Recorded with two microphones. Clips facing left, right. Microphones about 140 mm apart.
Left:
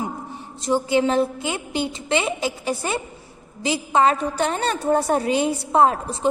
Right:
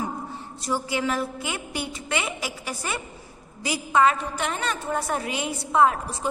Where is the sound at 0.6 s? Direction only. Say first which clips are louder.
Left 7 dB; 25° left (ahead or behind).